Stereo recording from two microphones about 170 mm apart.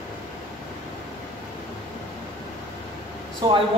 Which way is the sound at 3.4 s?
20° right (ahead or behind).